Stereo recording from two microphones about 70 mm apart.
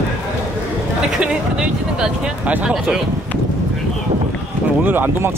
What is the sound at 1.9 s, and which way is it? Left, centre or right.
Speech, centre.